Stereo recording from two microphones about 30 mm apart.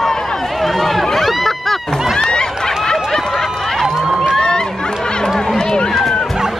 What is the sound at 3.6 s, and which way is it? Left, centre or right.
Run, centre.